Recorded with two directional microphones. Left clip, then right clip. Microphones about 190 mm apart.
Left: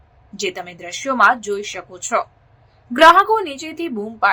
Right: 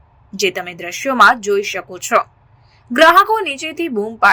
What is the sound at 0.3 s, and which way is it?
A woman's voice, 15° right (ahead or behind).